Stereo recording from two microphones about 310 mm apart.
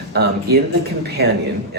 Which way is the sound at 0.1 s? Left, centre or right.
Right.